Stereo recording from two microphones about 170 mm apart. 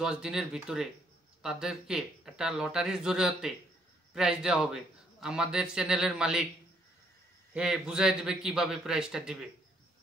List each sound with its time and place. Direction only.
0.0 s a man's voice: 5° right (ahead or behind)
7.5 s a man's voice: 5° right (ahead or behind)